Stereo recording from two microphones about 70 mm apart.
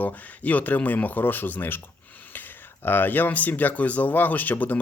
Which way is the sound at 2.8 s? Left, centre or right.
Left.